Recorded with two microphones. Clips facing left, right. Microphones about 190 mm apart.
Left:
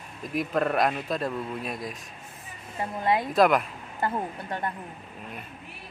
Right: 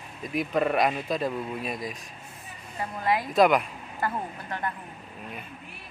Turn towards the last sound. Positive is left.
turn(degrees=25)  # may be behind; listen again after turning